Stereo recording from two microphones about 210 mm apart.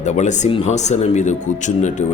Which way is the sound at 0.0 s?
35° left (ahead or behind).